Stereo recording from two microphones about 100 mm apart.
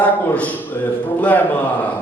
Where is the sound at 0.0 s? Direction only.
15° left (ahead or behind).